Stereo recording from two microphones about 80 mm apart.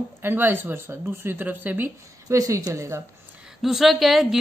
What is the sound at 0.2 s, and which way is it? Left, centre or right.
A woman's voice, right.